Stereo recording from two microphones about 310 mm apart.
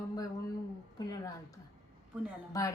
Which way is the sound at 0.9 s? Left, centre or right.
Centre.